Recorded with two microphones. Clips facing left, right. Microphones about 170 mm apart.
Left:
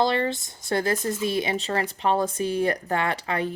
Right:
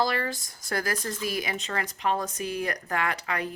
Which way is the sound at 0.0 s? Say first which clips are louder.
Left 5 dB; 25° left (ahead or behind).